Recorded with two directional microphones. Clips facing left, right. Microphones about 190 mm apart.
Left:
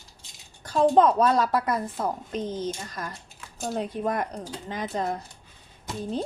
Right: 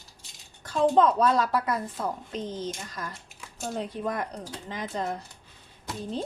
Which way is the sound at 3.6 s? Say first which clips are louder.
Left 3 dB; 45° left (ahead or behind).